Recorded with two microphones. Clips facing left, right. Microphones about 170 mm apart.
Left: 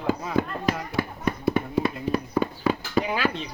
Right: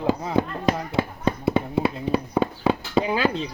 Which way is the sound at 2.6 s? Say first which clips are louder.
Right 3 dB; 25° right (ahead or behind).